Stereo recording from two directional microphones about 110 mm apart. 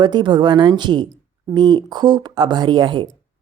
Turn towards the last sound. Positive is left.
turn(degrees=-45)  # may be behind; listen again after turning